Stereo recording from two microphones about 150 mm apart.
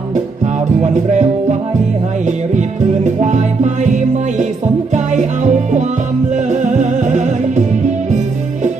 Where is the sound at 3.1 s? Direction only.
50° right (ahead or behind).